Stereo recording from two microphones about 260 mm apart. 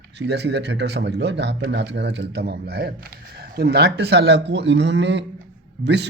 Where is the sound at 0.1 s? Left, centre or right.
Right.